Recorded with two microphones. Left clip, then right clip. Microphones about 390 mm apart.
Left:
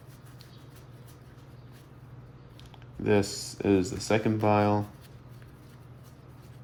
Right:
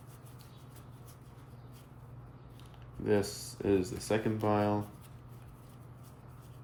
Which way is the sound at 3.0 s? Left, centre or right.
Left.